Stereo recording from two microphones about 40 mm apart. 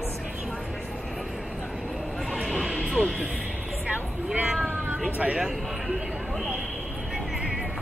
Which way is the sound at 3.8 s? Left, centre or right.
Right.